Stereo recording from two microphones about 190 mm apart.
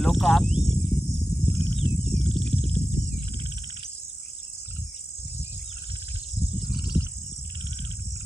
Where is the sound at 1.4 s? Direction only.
25° right (ahead or behind).